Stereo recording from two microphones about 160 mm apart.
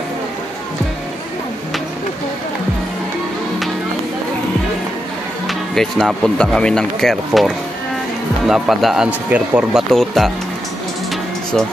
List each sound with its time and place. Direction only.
5.5 s speech: centre (ahead or behind)